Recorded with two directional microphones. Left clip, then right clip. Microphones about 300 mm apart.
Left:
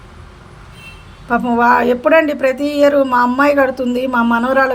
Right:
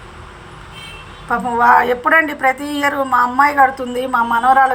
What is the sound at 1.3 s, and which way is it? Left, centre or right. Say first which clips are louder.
A woman's voice: even; left.